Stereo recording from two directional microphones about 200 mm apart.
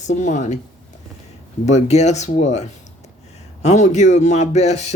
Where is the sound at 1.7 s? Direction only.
35° left (ahead or behind).